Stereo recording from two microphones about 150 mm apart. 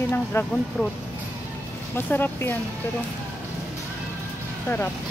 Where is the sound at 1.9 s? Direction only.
15° left (ahead or behind).